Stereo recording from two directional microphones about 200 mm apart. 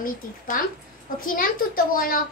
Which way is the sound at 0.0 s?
45° left (ahead or behind).